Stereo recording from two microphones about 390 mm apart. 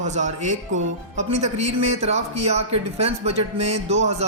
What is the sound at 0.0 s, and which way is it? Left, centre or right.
Speech, centre.